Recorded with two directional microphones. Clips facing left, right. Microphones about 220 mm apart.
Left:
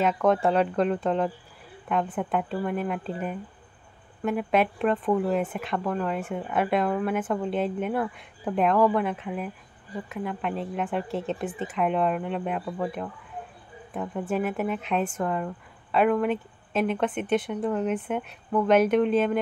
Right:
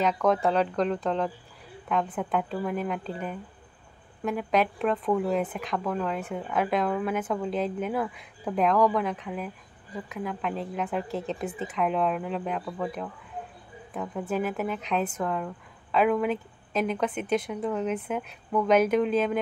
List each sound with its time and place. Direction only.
0.0 s speech: centre (ahead or behind)